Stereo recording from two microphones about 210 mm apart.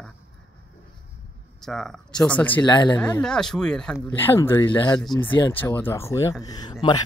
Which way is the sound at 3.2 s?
5° left (ahead or behind).